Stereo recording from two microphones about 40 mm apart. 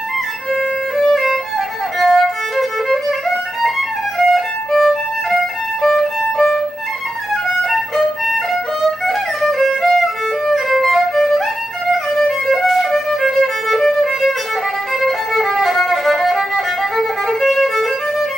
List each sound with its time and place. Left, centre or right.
0.5 s violin: centre